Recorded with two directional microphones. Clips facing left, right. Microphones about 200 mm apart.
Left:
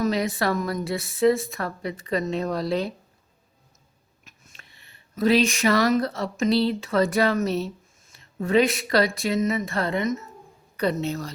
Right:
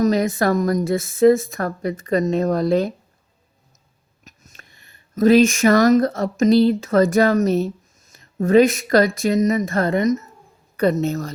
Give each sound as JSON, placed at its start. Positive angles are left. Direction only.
{"t": 0.0, "sound": "a woman's voice", "side_deg": -45}
{"t": 4.2, "sound": "a woman's voice", "side_deg": -40}